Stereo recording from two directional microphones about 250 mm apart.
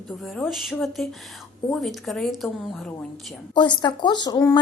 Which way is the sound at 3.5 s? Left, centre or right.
Centre.